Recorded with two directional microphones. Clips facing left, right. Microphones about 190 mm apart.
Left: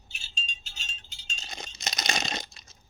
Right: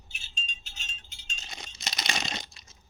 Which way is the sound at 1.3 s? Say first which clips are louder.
Left 3 dB; 45° left (ahead or behind).